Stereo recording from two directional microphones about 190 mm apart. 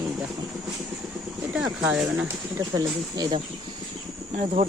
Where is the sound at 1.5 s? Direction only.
5° right (ahead or behind).